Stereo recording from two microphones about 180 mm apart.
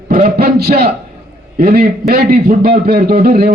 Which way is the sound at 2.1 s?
60° right (ahead or behind).